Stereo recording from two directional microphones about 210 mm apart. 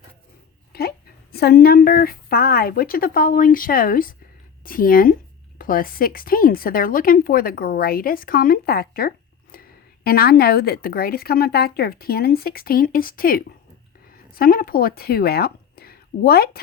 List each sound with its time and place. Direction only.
0.7 s a woman's voice: 50° left (ahead or behind)